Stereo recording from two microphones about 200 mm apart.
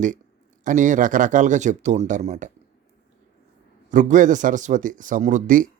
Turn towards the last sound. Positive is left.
turn(degrees=-40)  # may be behind; listen again after turning